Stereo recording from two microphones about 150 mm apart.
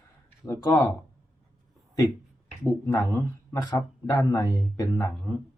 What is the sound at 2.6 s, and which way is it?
Speech, 15° left (ahead or behind).